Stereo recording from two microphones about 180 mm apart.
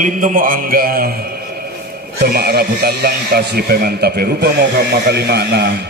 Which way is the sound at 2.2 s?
60° right (ahead or behind).